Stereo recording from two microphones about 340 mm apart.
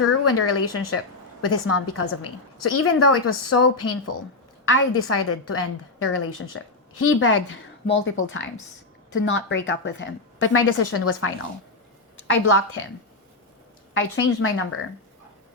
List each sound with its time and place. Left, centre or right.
0.0 s a woman's voice: left
12.3 s a woman's voice: left
13.9 s a woman's voice: left